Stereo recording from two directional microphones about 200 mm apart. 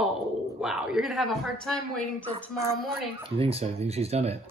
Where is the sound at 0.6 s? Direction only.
Centre (ahead or behind).